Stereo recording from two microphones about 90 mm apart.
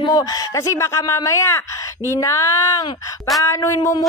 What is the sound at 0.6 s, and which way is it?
A woman's voice, 30° left (ahead or behind).